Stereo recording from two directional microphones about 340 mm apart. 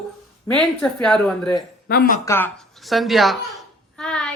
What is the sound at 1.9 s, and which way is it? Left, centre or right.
Speech, left.